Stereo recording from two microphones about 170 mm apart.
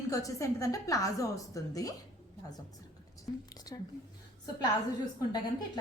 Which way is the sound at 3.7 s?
20° left (ahead or behind).